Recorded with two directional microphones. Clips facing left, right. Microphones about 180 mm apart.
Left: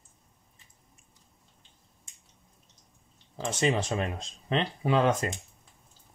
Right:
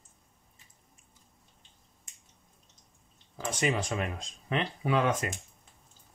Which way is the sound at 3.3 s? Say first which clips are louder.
Left 3 dB; 25° left (ahead or behind).